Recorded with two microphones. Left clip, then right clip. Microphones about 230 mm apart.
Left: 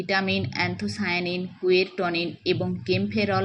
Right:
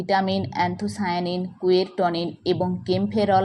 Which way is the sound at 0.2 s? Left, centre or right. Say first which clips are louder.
Right 3 dB; centre.